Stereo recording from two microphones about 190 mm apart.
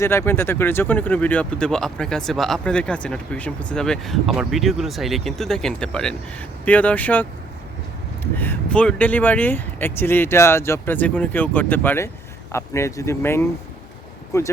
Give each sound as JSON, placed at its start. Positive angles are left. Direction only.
{"t": 0.0, "sound": "speech", "side_deg": 15}